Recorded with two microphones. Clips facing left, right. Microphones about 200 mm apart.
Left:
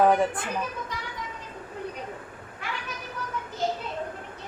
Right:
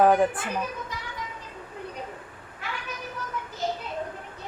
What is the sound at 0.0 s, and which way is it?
Speech, 5° right (ahead or behind).